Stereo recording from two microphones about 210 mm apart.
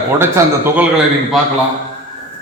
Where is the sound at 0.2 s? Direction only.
10° right (ahead or behind).